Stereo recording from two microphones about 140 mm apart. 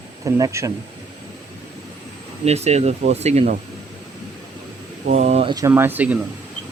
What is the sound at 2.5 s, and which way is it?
Speech, 50° right (ahead or behind).